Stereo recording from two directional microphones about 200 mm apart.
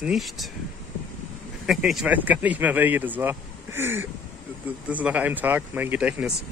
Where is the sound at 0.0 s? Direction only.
Centre (ahead or behind).